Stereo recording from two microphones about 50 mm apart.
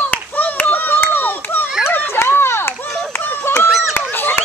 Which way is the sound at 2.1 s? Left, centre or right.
Left.